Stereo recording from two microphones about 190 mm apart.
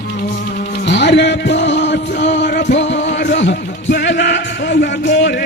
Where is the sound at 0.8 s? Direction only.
65° left (ahead or behind).